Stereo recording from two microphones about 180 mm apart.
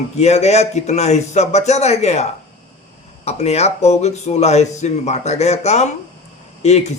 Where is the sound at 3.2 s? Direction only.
35° left (ahead or behind).